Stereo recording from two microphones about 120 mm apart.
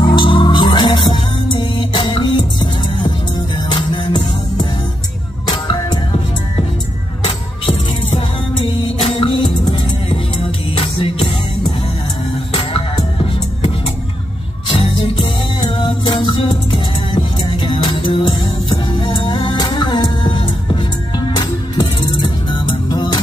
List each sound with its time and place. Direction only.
0.0 s music: 40° left (ahead or behind)
8.8 s music: 50° left (ahead or behind)
10.8 s music: 50° left (ahead or behind)
12.5 s music: 50° left (ahead or behind)
14.7 s music: 45° left (ahead or behind)